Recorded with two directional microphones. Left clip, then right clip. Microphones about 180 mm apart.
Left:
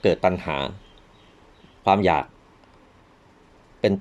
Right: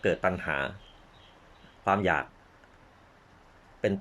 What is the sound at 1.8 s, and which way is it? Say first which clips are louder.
Speech: left 7 dB; 30° left (ahead or behind).